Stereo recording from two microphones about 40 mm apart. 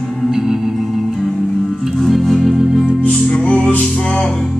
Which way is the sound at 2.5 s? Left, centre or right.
Centre.